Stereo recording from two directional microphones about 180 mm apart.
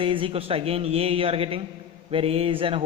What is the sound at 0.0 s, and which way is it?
A man's voice, 30° right (ahead or behind).